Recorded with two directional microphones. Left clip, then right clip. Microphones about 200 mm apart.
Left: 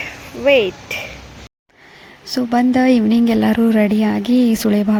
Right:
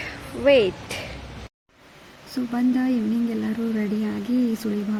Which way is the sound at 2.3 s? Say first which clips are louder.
Left 9 dB; 35° left (ahead or behind).